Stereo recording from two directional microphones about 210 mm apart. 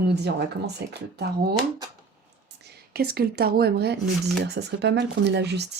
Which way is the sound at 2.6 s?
50° right (ahead or behind).